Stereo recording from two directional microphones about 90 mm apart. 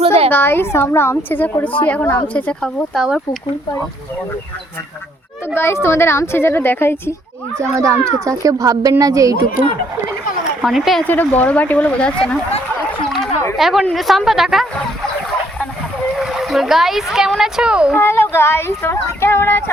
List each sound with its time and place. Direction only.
0.0 s a sound: 90° right
0.3 s speech: 25° left (ahead or behind)
5.5 s speech: 25° left (ahead or behind)
7.8 s speech: 35° right (ahead or behind)
10.6 s a woman's voice: 5° right (ahead or behind)
11.0 s speech: 20° left (ahead or behind)
13.6 s a woman's voice: 5° right (ahead or behind)
16.1 s speech: 5° right (ahead or behind)
17.9 s speech: 25° left (ahead or behind)